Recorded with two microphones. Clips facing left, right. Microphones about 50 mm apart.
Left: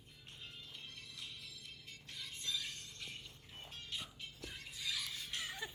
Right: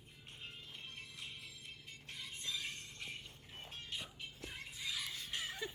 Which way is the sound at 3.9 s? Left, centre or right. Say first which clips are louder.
Even; centre.